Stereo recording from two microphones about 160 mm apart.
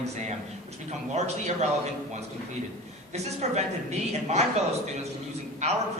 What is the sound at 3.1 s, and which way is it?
A man's voice, 45° right (ahead or behind).